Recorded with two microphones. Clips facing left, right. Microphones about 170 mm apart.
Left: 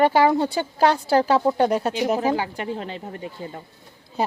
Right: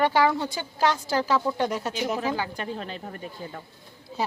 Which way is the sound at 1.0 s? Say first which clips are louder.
Left 6 dB; 60° left (ahead or behind).